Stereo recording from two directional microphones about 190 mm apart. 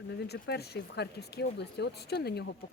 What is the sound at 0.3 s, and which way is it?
Speech, 60° left (ahead or behind).